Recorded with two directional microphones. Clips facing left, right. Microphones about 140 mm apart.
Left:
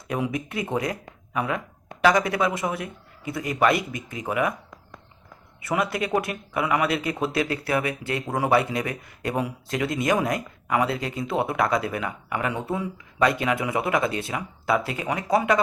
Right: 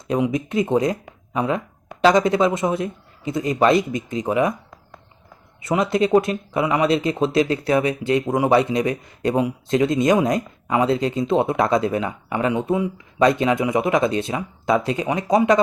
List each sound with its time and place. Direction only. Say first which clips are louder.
0.1 s speech: right 7 dB; 20° right (ahead or behind)
5.6 s speech: right 6 dB; 20° right (ahead or behind)